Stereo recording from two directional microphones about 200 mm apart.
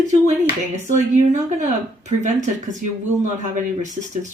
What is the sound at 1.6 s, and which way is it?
Speech, 35° right (ahead or behind).